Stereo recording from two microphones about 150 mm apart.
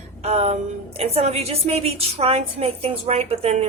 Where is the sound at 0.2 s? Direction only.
45° right (ahead or behind).